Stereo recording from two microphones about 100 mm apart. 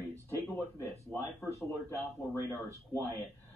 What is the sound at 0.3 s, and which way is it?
Speech, 30° left (ahead or behind).